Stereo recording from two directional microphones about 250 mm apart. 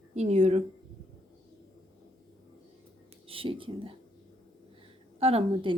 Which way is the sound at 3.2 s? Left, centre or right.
Right.